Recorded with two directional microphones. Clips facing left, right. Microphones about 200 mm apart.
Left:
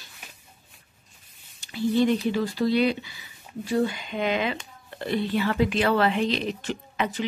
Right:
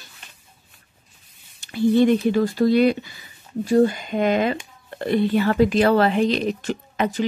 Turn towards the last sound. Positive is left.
turn(degrees=-45)  # may be behind; listen again after turning